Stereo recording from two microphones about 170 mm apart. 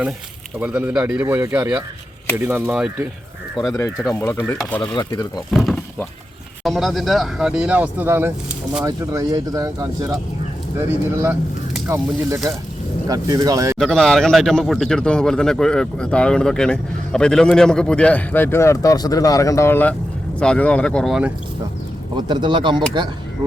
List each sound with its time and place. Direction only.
0.6 s speech: 10° right (ahead or behind)
3.8 s speech: 15° left (ahead or behind)
5.5 s speech: centre (ahead or behind); by 13.7 s 20° right (ahead or behind)
13.7 s speech: centre (ahead or behind)
22.1 s speech: 25° right (ahead or behind)